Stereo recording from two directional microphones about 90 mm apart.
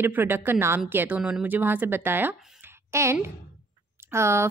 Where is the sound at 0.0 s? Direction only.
25° right (ahead or behind).